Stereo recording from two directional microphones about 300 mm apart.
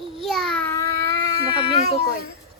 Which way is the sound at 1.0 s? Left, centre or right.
Right.